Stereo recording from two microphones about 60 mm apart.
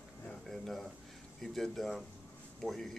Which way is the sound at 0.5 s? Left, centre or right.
Centre.